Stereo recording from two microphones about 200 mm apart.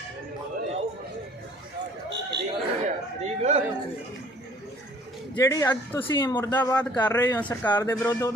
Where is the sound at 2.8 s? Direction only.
35° right (ahead or behind).